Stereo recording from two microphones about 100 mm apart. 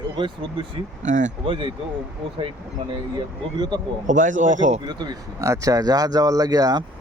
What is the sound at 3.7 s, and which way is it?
Speech, 45° right (ahead or behind).